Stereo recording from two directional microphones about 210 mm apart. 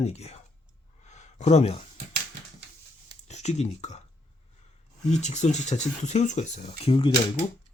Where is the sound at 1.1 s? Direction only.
35° left (ahead or behind).